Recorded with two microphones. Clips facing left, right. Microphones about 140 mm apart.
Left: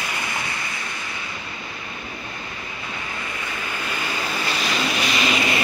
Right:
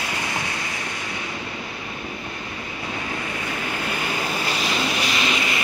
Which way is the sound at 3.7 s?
25° right (ahead or behind).